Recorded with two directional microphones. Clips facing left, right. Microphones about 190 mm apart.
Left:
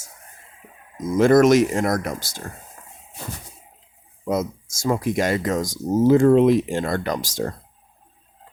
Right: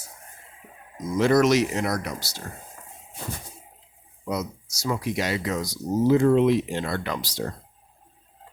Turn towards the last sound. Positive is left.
turn(degrees=45)  # may be behind; listen again after turning